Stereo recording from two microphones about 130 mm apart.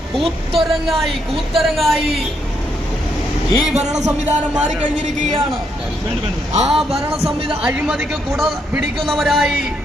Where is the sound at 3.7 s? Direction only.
60° right (ahead or behind).